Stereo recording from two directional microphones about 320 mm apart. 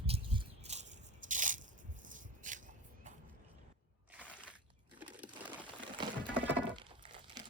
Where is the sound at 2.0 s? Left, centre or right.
Right.